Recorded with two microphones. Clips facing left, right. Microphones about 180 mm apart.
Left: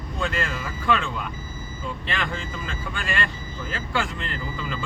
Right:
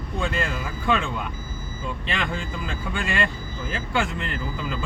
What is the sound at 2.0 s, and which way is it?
Speech, 20° right (ahead or behind).